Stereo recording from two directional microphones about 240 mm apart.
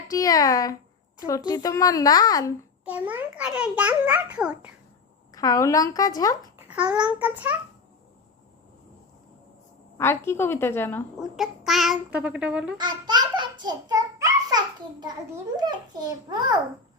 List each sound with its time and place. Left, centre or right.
0.1 s a child's voice: centre
2.8 s a child's voice: centre
5.3 s a child's voice: centre
6.6 s a child's voice: centre
10.0 s a child's voice: centre
11.2 s a child's voice: centre
12.7 s a sound: centre
15.5 s a child's voice: centre